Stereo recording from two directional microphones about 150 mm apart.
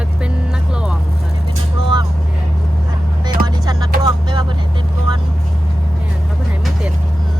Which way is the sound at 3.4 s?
25° right (ahead or behind).